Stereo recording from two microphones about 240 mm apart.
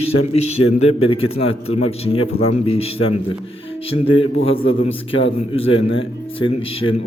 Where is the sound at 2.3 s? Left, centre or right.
Left.